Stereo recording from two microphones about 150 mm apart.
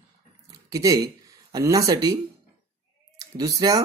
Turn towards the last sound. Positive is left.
turn(degrees=-25)  # may be behind; listen again after turning